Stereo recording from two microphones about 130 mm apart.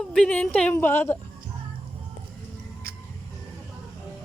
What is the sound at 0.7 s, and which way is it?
Speech, 15° left (ahead or behind).